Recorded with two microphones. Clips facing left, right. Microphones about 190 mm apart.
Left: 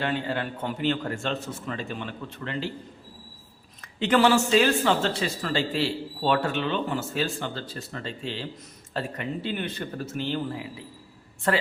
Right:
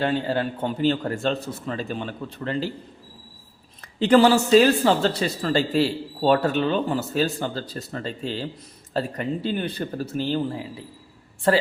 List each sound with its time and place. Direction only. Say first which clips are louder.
0.0 s speech: right 5 dB; 35° right (ahead or behind)
4.0 s speech: right 4 dB; 35° right (ahead or behind)